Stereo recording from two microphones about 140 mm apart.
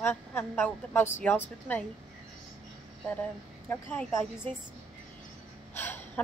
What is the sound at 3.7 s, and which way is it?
Speech, 10° left (ahead or behind).